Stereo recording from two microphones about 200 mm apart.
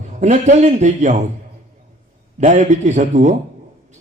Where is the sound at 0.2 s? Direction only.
35° right (ahead or behind).